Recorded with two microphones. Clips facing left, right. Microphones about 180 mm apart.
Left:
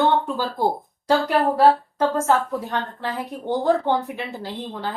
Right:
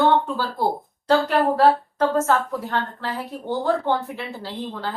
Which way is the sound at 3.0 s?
15° left (ahead or behind).